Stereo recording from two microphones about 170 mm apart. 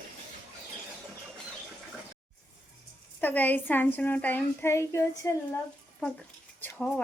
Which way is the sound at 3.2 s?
10° left (ahead or behind).